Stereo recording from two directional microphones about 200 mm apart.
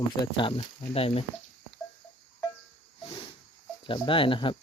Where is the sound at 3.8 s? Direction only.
25° left (ahead or behind).